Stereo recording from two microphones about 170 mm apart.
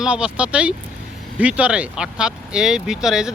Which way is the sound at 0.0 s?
5° right (ahead or behind).